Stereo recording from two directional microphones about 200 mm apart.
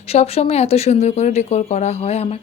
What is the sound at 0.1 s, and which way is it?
Speech, 30° left (ahead or behind).